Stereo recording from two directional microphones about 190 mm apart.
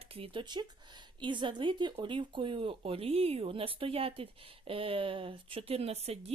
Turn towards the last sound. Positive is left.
turn(degrees=-35)  # may be behind; listen again after turning